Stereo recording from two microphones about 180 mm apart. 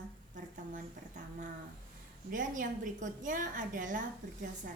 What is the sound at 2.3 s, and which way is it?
A woman's voice, 45° right (ahead or behind).